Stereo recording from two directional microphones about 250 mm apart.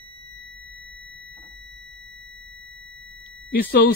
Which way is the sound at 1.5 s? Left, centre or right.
Right.